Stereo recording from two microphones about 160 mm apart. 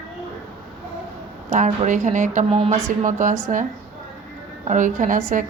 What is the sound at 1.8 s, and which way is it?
A woman's voice, 50° right (ahead or behind).